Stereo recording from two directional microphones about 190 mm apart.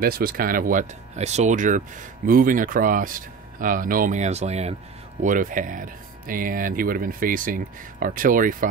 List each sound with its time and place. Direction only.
0.0 s speech: 50° right (ahead or behind)